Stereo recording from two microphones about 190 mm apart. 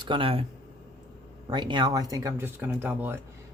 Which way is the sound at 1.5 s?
25° right (ahead or behind).